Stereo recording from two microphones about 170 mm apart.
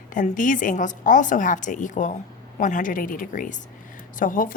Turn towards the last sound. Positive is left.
turn(degrees=50)  # may be behind; listen again after turning